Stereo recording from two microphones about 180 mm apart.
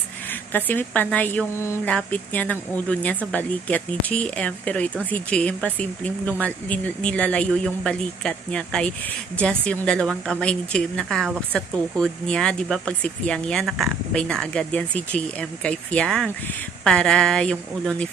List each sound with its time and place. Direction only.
0.3 s a woman's voice: 10° left (ahead or behind)